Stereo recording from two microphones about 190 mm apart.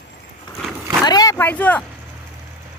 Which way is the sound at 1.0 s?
20° left (ahead or behind).